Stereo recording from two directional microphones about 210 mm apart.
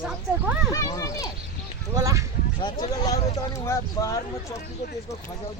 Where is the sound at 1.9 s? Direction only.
15° right (ahead or behind).